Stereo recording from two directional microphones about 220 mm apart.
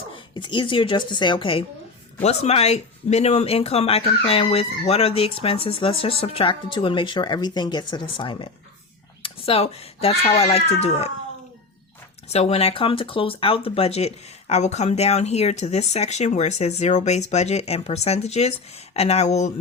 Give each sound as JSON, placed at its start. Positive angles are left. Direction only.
{"t": 0.3, "sound": "speech", "side_deg": 20}
{"t": 12.3, "sound": "speech", "side_deg": 30}